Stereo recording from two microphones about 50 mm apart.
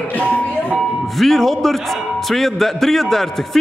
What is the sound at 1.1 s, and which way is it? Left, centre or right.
A man's voice, centre.